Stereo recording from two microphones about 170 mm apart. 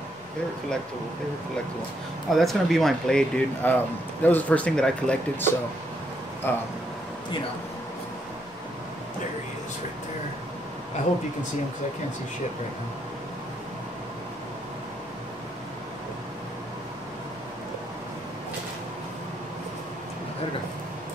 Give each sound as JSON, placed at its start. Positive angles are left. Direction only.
{"t": 2.3, "sound": "speech", "side_deg": 0}